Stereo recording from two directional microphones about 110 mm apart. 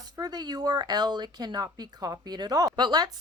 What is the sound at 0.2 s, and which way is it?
Speech, 40° right (ahead or behind).